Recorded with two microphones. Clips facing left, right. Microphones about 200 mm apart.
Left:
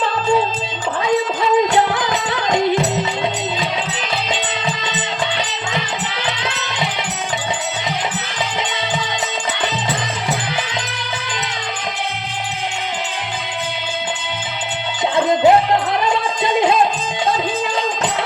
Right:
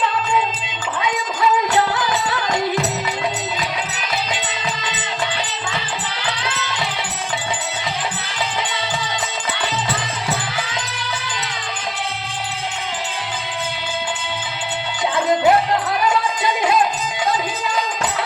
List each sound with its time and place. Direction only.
0.0 s music: 35° left (ahead or behind)
1.7 s music: 20° left (ahead or behind)
6.2 s music: 20° left (ahead or behind)
15.1 s music: 20° left (ahead or behind)